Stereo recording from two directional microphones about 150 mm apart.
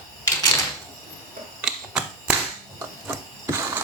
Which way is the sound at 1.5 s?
5° right (ahead or behind).